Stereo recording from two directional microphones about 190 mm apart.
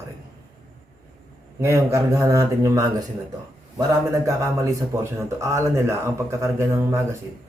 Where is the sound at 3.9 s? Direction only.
15° right (ahead or behind).